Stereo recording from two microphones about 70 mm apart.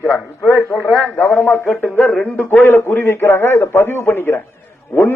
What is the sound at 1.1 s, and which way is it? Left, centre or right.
A man's voice, left.